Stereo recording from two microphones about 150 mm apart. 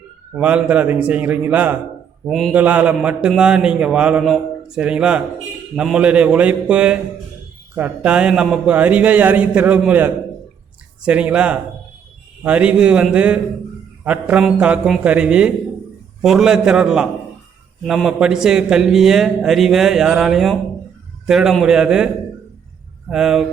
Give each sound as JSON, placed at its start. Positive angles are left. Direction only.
{"t": 0.3, "sound": "a man's voice", "side_deg": -10}
{"t": 2.2, "sound": "a man's voice", "side_deg": 0}
{"t": 2.5, "sound": "a man's voice", "side_deg": -10}